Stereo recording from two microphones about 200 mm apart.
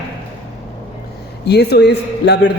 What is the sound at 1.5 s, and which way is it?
A man's voice, 55° left (ahead or behind).